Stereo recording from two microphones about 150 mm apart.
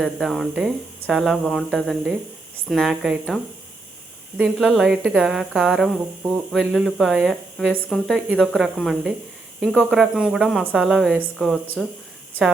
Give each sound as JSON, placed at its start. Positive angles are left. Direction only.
{"t": 0.0, "sound": "a woman's voice", "side_deg": 0}